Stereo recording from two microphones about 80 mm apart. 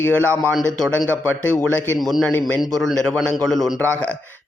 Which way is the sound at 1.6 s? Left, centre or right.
Left.